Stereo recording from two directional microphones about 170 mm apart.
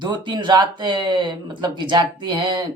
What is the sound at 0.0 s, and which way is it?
Speech, 25° right (ahead or behind).